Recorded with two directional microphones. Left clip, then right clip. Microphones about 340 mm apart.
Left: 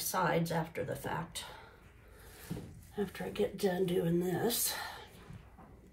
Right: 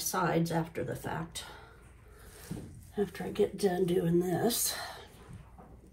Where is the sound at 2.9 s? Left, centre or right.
Centre.